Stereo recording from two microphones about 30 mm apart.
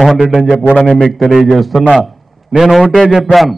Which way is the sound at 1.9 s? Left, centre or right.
Centre.